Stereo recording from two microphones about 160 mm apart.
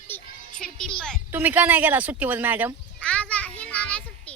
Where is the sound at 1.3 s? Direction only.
10° right (ahead or behind).